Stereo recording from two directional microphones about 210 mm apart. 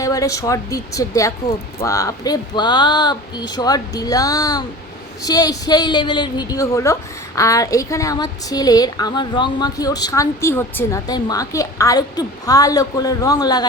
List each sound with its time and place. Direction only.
0.0 s a woman's voice: 15° left (ahead or behind)